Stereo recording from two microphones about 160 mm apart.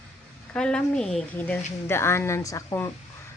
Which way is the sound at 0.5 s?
5° left (ahead or behind).